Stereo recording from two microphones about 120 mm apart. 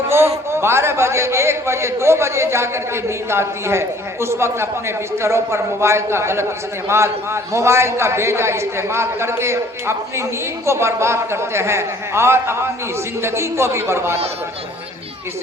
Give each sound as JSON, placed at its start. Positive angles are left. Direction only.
{"t": 0.5, "sound": "a man's voice", "side_deg": -20}